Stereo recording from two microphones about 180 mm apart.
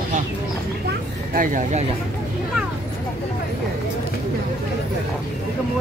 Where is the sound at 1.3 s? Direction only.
45° right (ahead or behind).